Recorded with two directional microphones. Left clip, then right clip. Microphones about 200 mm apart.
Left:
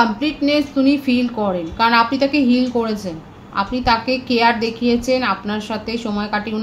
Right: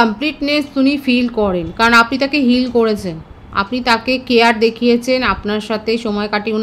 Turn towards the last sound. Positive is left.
turn(degrees=-55)  # may be behind; listen again after turning